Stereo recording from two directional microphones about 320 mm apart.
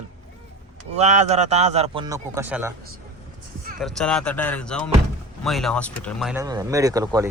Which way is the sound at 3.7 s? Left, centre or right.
Centre.